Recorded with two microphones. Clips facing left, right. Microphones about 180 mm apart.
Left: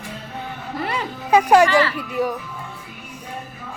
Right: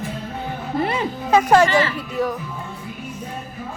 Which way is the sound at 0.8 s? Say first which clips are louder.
Right 3 dB; 20° right (ahead or behind).